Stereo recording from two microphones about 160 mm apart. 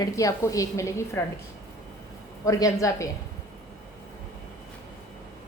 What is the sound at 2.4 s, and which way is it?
Speech, 20° left (ahead or behind).